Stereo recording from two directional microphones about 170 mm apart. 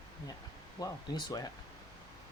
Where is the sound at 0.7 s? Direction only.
25° left (ahead or behind).